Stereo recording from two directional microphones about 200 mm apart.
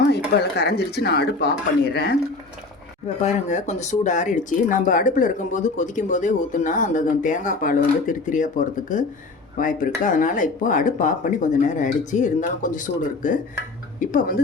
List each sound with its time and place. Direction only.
0.1 s speech: 55° left (ahead or behind)
3.5 s speech: 35° left (ahead or behind)